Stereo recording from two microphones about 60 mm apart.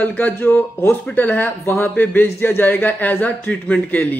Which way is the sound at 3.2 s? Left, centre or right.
Centre.